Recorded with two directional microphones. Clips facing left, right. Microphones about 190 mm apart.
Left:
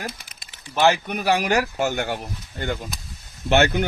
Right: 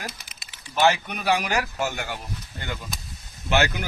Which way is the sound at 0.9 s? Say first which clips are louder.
Left 3 dB; 55° left (ahead or behind).